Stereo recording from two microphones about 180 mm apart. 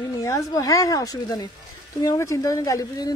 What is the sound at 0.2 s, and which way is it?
Speech, 20° left (ahead or behind).